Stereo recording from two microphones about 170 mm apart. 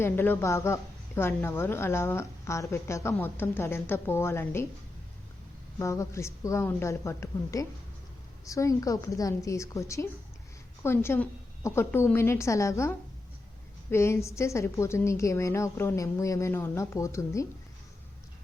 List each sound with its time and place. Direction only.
0.0 s a woman's voice: 15° left (ahead or behind)
5.8 s a woman's voice: 15° left (ahead or behind)